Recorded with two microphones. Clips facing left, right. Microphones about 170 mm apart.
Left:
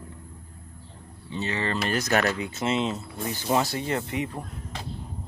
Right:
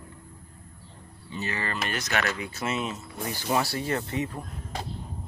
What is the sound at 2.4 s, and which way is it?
Speech, 25° left (ahead or behind).